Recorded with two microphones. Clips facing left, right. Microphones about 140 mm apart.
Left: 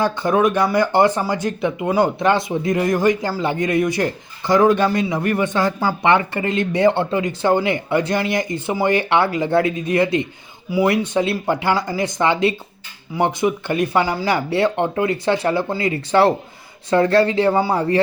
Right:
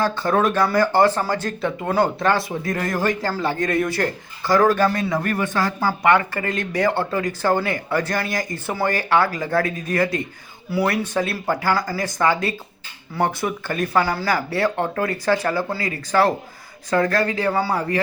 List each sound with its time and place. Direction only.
0.0 s speech: 15° left (ahead or behind)